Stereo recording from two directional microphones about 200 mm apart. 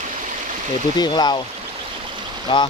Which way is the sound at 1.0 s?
20° left (ahead or behind).